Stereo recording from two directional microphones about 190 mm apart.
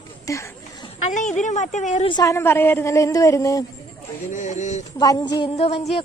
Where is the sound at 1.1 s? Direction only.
40° left (ahead or behind).